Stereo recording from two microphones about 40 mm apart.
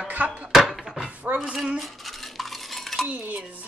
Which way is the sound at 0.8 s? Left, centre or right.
Centre.